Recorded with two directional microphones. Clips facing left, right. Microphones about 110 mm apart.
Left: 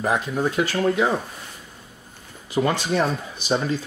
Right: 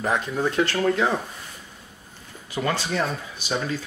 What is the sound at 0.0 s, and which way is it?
Speech, 10° left (ahead or behind).